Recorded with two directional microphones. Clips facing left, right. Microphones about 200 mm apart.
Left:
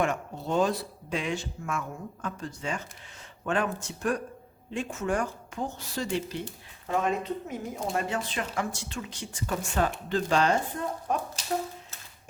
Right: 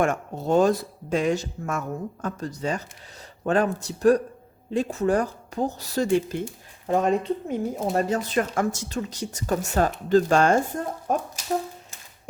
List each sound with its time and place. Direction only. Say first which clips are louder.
0.0 s speech: right 5 dB; 45° right (ahead or behind)
6.8 s speech: right 6 dB; 35° right (ahead or behind)